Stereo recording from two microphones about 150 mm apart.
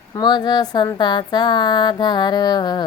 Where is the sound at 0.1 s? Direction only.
30° left (ahead or behind).